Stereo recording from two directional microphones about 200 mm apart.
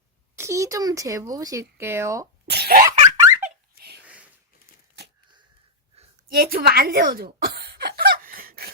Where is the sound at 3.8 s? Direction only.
55° right (ahead or behind).